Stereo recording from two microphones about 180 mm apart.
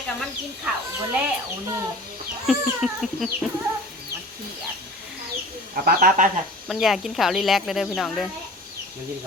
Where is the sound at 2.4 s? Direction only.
Centre (ahead or behind).